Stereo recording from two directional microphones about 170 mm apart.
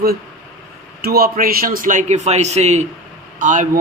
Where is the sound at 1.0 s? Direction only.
60° right (ahead or behind).